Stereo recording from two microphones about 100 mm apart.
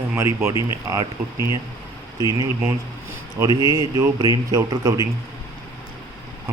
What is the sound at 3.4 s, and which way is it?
A man's voice, 45° right (ahead or behind).